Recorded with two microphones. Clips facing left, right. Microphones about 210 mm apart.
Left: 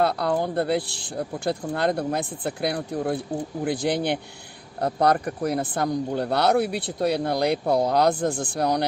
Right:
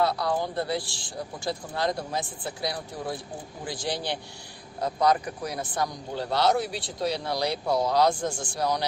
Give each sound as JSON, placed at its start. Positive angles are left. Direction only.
{"t": 0.0, "sound": "speech", "side_deg": 60}